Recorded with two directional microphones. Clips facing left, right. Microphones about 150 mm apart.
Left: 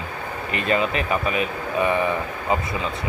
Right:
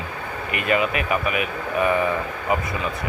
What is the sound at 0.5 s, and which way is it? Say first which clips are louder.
Speech: even; 30° left (ahead or behind).